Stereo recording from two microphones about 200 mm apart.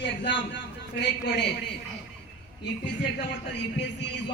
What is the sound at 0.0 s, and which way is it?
Speech, 60° left (ahead or behind).